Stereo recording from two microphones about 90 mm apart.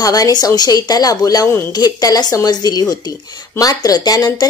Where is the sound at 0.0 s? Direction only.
45° left (ahead or behind).